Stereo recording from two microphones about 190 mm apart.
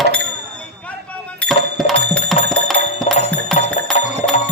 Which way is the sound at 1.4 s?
Centre (ahead or behind).